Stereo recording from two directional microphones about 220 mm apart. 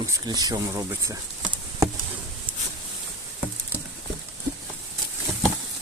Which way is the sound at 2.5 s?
25° right (ahead or behind).